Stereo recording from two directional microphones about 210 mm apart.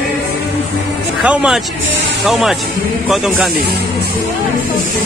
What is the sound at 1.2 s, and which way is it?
Speech, 5° right (ahead or behind).